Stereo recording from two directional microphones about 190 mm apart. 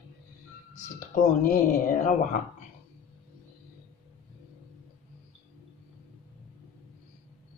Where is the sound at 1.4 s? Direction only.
45° left (ahead or behind).